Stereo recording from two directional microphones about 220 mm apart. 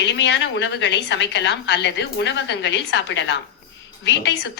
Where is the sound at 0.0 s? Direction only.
55° left (ahead or behind).